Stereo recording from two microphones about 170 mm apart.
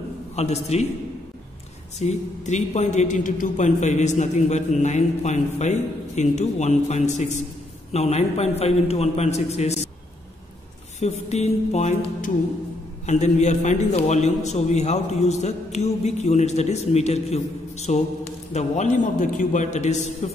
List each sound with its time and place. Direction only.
0.4 s a man's voice: 40° left (ahead or behind)
2.0 s a man's voice: 45° left (ahead or behind)
11.0 s a man's voice: 40° left (ahead or behind)